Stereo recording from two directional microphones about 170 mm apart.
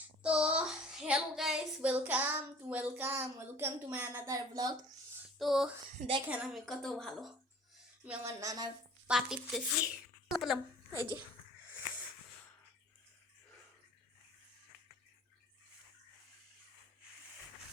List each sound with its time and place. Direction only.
0.2 s child singing: 5° right (ahead or behind); by 4.7 s 20° right (ahead or behind)
5.4 s a woman's voice: centre (ahead or behind)
6.0 s a woman's voice: 30° right (ahead or behind)
6.2 s a woman's voice: 5° right (ahead or behind)
8.0 s child singing: 10° right (ahead or behind)
9.0 s speech: 5° right (ahead or behind)